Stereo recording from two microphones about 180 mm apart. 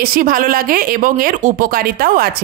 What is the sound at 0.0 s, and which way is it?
Speech, 50° right (ahead or behind).